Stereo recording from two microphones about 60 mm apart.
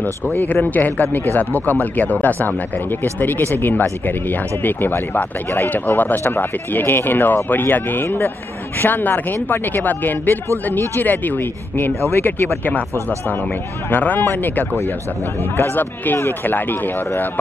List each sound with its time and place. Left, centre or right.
0.0 s speech: left
13.8 s speech: left